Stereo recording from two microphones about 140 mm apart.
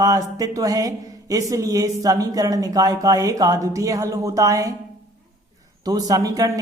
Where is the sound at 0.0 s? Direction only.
25° right (ahead or behind).